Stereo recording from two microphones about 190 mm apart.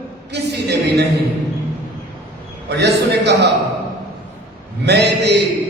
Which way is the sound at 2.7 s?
60° right (ahead or behind).